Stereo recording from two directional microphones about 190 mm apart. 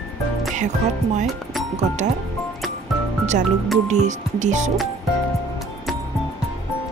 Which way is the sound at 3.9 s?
40° right (ahead or behind).